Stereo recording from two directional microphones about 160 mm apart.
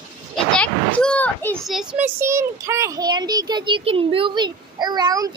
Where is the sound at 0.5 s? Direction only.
5° left (ahead or behind).